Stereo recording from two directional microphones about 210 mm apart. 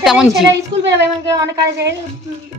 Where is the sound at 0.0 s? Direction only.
Centre (ahead or behind).